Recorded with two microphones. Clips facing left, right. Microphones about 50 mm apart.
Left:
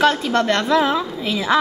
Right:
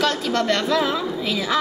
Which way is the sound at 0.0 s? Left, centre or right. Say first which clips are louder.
Left 5 dB; left.